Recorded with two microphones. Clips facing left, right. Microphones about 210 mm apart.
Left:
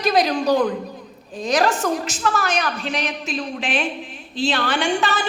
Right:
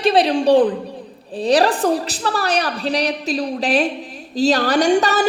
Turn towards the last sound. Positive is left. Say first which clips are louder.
# right 6 dB
turn(degrees=-40)  # may be behind; listen again after turning